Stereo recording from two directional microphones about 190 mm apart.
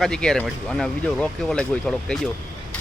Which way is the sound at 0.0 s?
5° left (ahead or behind).